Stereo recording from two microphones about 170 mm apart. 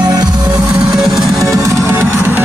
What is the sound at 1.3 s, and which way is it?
Music, 20° right (ahead or behind).